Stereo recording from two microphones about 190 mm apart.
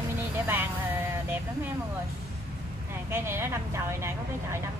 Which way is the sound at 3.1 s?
15° right (ahead or behind).